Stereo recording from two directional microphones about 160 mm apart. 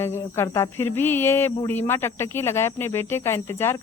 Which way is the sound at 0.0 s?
15° left (ahead or behind).